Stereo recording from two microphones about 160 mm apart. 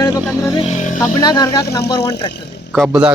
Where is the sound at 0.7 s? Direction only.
50° left (ahead or behind).